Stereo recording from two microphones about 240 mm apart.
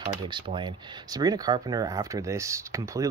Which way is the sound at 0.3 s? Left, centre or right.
Centre.